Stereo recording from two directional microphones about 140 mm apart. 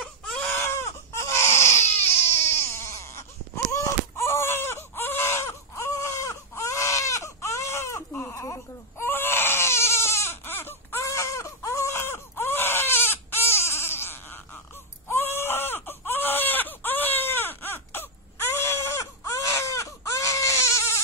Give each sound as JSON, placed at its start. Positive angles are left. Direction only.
{"t": 0.0, "sound": "baby cry", "side_deg": 5}
{"t": 0.5, "sound": "baby cry", "side_deg": 15}